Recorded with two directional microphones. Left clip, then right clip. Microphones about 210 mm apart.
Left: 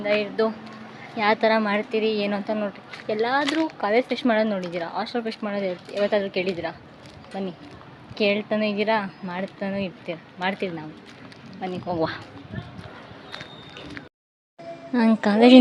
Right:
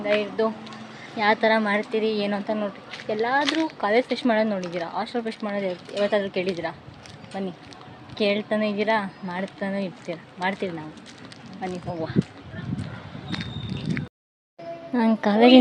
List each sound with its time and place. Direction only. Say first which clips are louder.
0.0 s a woman's voice: even; 5° left (ahead or behind)
8.1 s a woman's voice: left 1 dB; 5° left (ahead or behind)
11.9 s speech: left 2 dB; 45° left (ahead or behind)
13.3 s a sound: right 5 dB; 5° left (ahead or behind)
14.9 s speech: left 1 dB; 5° left (ahead or behind)